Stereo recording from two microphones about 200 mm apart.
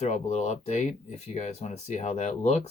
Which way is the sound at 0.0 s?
35° left (ahead or behind).